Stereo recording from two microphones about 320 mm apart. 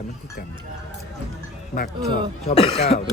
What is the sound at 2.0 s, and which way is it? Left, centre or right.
Speech, centre.